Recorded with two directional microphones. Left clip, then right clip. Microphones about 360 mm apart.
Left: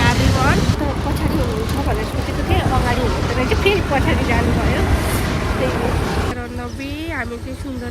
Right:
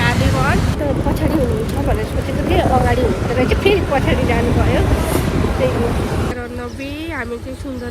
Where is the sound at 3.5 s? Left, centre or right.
Centre.